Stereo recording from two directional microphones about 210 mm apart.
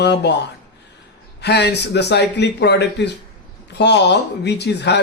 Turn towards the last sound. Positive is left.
turn(degrees=55)  # may be behind; listen again after turning